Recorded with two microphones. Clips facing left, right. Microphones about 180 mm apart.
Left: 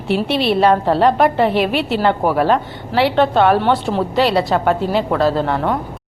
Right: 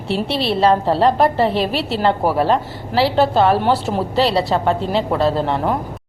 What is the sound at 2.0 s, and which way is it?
Speech, 5° right (ahead or behind).